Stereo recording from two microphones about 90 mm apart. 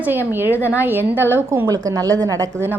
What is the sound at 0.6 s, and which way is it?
A woman's voice, 20° right (ahead or behind).